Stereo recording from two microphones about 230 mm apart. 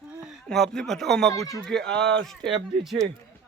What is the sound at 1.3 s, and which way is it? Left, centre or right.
Speech, centre.